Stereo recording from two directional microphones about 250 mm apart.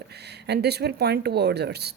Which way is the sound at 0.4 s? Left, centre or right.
Right.